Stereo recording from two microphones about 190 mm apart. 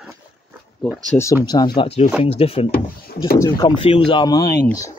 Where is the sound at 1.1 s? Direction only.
10° left (ahead or behind).